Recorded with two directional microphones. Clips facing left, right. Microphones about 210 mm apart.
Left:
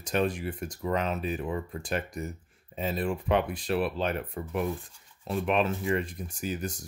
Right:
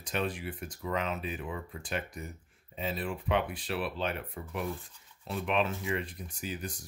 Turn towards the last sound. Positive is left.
turn(degrees=45)  # may be behind; listen again after turning